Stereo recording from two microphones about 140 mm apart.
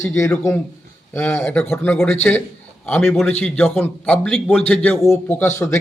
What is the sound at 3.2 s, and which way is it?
A man's voice, 10° left (ahead or behind).